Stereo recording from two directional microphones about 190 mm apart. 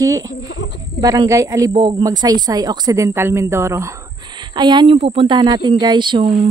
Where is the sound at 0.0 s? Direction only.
20° right (ahead or behind).